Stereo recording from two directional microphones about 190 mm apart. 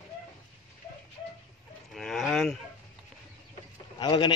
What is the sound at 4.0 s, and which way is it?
Speech, 25° left (ahead or behind).